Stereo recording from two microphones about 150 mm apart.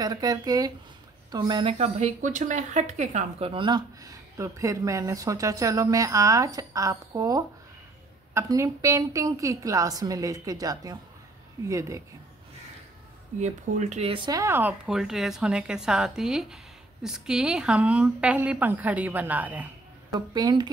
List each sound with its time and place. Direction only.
0.0 s speech: 25° right (ahead or behind)
13.4 s speech: 50° right (ahead or behind)
14.0 s speech: 30° right (ahead or behind)
14.4 s a woman's voice: 15° right (ahead or behind)
20.1 s speech: 25° right (ahead or behind)